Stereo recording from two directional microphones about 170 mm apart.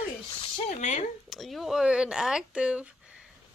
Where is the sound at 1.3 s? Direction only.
Centre (ahead or behind).